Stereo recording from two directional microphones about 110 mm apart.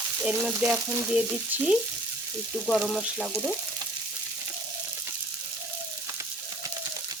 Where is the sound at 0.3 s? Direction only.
5° right (ahead or behind).